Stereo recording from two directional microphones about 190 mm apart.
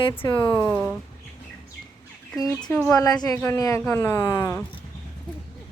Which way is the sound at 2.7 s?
10° left (ahead or behind).